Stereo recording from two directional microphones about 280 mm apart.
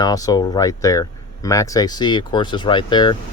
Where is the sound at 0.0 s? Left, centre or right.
Centre.